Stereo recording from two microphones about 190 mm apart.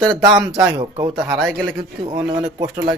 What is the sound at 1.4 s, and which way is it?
Speech, centre (ahead or behind).